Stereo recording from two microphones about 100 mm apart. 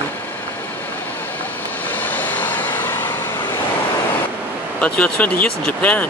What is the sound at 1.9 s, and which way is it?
Vehicle, 15° left (ahead or behind).